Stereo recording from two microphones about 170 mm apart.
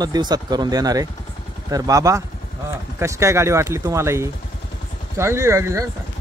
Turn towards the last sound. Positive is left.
turn(degrees=-15)  # may be behind; listen again after turning